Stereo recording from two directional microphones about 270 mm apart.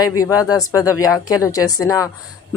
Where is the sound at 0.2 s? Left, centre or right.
Centre.